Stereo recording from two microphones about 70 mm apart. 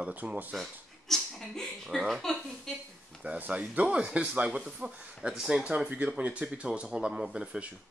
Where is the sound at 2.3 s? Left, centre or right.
Centre.